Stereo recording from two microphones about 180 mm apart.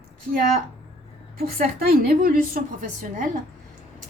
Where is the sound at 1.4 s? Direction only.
55° right (ahead or behind).